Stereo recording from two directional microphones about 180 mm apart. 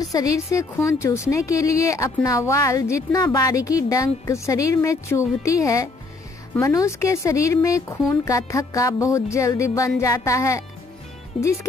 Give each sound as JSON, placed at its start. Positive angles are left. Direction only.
{"t": 0.0, "sound": "a woman's voice", "side_deg": 20}
{"t": 11.3, "sound": "speech", "side_deg": 30}